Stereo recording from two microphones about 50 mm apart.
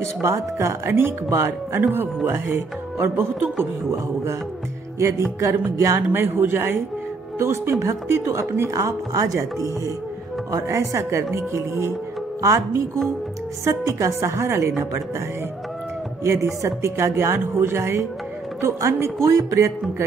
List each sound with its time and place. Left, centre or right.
0.2 s speech: right
3.9 s speech: right
4.9 s a woman's voice: right
6.1 s speech: right
7.3 s speech: right
7.8 s speech: right
8.5 s a woman's voice: right
11.3 s speech: right
12.4 s a woman's voice: right
16.6 s speech: right
18.6 s speech: right
19.2 s speech: right